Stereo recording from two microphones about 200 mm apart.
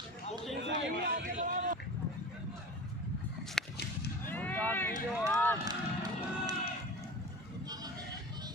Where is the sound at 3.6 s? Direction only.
Centre (ahead or behind).